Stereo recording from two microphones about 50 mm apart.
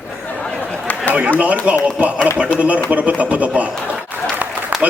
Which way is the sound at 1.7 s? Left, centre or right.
Right.